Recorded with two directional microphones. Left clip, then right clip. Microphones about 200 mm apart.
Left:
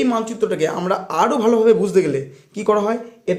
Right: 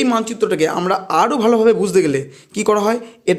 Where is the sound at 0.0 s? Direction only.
35° right (ahead or behind).